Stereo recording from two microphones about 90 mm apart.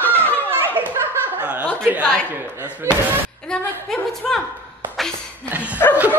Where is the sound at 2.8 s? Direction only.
30° right (ahead or behind).